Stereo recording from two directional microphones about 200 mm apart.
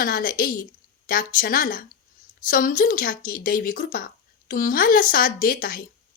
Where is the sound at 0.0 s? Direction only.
45° left (ahead or behind).